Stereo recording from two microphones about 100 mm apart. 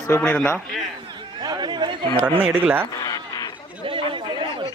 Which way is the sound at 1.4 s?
45° right (ahead or behind).